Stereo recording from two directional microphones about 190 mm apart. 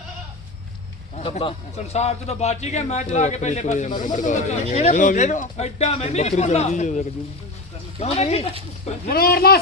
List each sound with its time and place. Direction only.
1.1 s a man's voice: 35° left (ahead or behind)
9.0 s speech: 55° left (ahead or behind)